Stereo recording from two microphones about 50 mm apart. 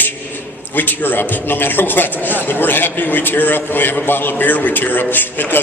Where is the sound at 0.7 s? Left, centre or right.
Left.